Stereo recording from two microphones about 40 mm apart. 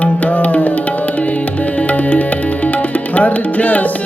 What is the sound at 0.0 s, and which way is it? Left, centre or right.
Music, left.